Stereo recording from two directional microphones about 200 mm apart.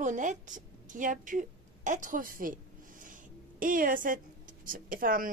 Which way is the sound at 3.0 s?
40° right (ahead or behind).